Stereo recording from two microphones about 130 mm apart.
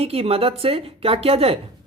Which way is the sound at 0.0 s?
50° right (ahead or behind).